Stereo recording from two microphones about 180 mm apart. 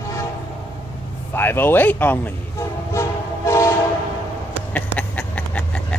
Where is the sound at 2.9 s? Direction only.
15° left (ahead or behind).